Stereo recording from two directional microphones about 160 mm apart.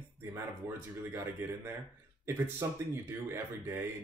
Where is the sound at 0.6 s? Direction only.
15° right (ahead or behind).